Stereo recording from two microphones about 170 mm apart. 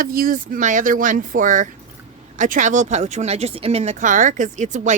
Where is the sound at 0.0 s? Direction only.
55° right (ahead or behind).